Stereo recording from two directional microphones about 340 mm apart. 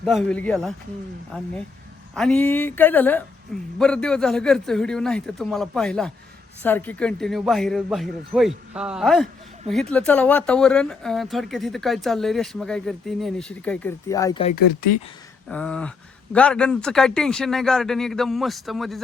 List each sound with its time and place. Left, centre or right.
0.0 s speech: centre
2.1 s speech: centre
14.5 s speech: left
15.4 s speech: centre